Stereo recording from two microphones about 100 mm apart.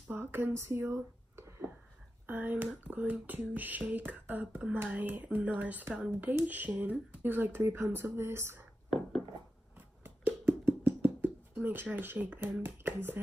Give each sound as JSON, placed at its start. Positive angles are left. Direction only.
{"t": 0.1, "sound": "speech", "side_deg": -20}
{"t": 2.2, "sound": "speech", "side_deg": -15}
{"t": 9.8, "sound": "a sound", "side_deg": -20}